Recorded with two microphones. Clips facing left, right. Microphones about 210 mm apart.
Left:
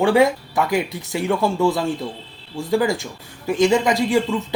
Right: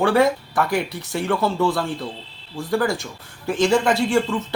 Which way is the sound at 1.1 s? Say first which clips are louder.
Left 1 dB; 15° left (ahead or behind).